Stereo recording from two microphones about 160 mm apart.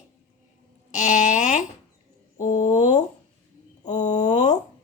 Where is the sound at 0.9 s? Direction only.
50° left (ahead or behind).